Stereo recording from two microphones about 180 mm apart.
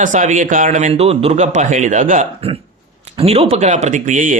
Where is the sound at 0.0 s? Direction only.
45° right (ahead or behind).